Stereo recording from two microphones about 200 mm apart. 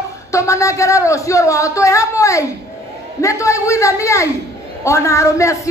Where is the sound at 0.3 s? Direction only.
15° left (ahead or behind).